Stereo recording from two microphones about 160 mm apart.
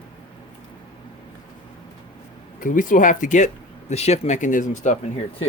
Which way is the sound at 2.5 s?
55° left (ahead or behind).